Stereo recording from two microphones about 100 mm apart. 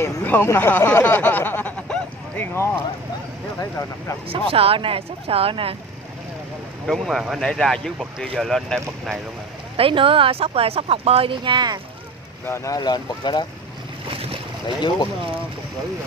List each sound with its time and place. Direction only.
0.0 s speech: 20° left (ahead or behind)
4.3 s speech: 70° right (ahead or behind)
6.9 s speech: centre (ahead or behind)
9.8 s speech: 60° right (ahead or behind); by 11.8 s 45° right (ahead or behind)
12.4 s speech: 25° left (ahead or behind)
12.7 s speech: 45° left (ahead or behind)
14.0 s boat: 70° right (ahead or behind)